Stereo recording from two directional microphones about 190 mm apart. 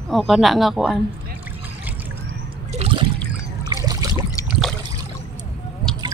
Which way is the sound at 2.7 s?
30° right (ahead or behind).